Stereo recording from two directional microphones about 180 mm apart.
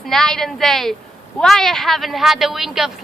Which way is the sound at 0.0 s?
Centre (ahead or behind).